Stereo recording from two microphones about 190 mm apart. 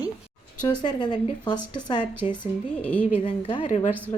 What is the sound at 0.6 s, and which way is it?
Speech, 25° left (ahead or behind).